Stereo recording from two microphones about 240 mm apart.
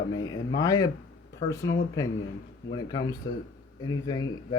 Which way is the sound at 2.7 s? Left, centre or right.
Centre.